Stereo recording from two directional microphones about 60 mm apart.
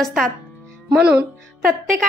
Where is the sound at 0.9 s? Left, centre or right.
Centre.